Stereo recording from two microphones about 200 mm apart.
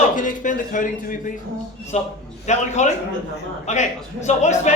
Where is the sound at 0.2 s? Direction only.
40° left (ahead or behind).